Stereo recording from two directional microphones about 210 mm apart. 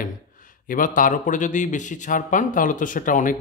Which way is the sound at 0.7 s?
40° left (ahead or behind).